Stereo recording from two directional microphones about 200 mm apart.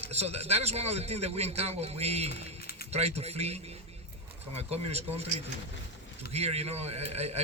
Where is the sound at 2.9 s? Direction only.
30° right (ahead or behind).